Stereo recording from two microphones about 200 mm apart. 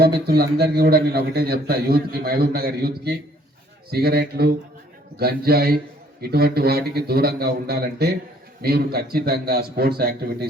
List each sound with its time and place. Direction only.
0.3 s a man's voice: 50° right (ahead or behind)